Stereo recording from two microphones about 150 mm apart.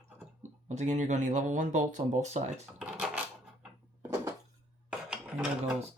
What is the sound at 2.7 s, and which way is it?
Drawer open or close, 5° right (ahead or behind).